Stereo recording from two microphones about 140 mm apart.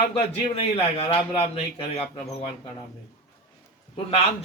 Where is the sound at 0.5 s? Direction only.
45° left (ahead or behind).